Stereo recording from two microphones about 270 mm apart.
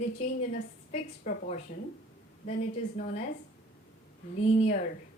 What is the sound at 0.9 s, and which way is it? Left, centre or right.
Speech, left.